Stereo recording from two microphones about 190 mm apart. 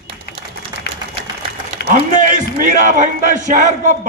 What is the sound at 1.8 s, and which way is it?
Speech, 45° right (ahead or behind).